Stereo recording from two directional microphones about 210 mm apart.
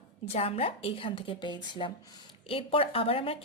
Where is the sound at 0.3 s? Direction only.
30° left (ahead or behind).